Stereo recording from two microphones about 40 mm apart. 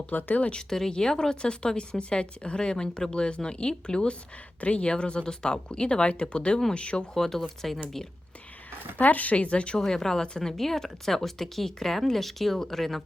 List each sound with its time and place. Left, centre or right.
0.1 s speech: left
0.7 s speech: centre
7.2 s speech: centre
9.0 s speech: left
9.7 s speech: centre